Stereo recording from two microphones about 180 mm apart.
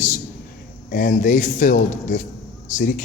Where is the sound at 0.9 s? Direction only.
50° left (ahead or behind).